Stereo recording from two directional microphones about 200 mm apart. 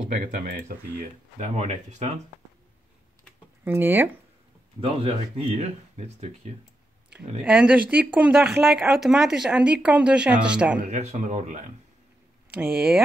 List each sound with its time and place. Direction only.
0.1 s speech: 45° right (ahead or behind)
3.6 s speech: 10° right (ahead or behind)
4.7 s speech: 30° right (ahead or behind)
7.1 s speech: 5° right (ahead or behind)
10.8 s speech: 35° right (ahead or behind)
12.5 s speech: 5° right (ahead or behind)